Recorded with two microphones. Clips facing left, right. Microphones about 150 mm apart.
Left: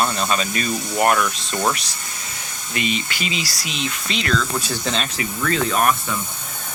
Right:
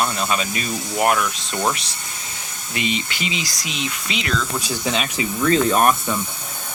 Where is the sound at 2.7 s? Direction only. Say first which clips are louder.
Even; 20° right (ahead or behind).